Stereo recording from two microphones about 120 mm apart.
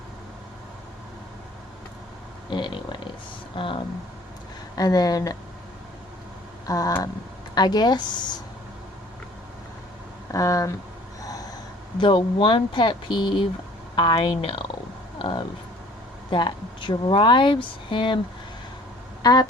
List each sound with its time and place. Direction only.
2.5 s speech: 40° left (ahead or behind)
6.7 s a sound: 30° left (ahead or behind)
7.5 s speech: 35° left (ahead or behind)
10.3 s a sound: 25° left (ahead or behind)
11.9 s speech: 45° left (ahead or behind)
16.3 s speech: 40° left (ahead or behind)
19.2 s speech: 35° left (ahead or behind)